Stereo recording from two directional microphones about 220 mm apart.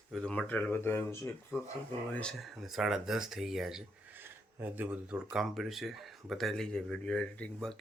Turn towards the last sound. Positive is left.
turn(degrees=5)  # may be behind; listen again after turning